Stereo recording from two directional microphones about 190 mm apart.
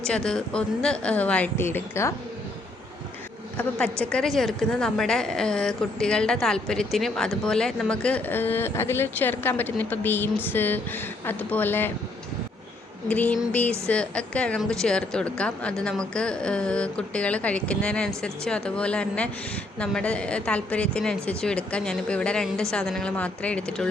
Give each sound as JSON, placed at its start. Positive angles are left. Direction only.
{"t": 0.0, "sound": "a woman's voice", "side_deg": 5}
{"t": 4.0, "sound": "a woman's voice", "side_deg": 5}
{"t": 13.1, "sound": "a woman's voice", "side_deg": 5}